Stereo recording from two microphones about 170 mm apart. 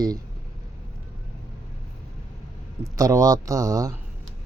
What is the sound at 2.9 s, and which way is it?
Speech, 20° right (ahead or behind).